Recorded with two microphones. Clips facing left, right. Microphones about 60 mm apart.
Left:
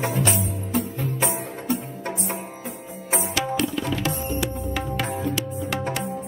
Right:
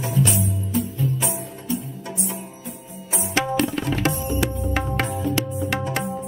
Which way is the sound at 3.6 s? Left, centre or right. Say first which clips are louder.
Right 3 dB; right.